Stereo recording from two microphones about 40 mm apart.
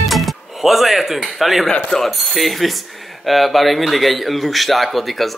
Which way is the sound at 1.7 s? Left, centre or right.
Left.